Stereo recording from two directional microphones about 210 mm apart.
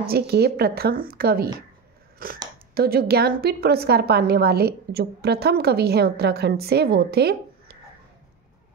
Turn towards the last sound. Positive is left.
turn(degrees=-50)  # may be behind; listen again after turning